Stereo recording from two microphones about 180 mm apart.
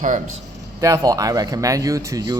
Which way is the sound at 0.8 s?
15° right (ahead or behind).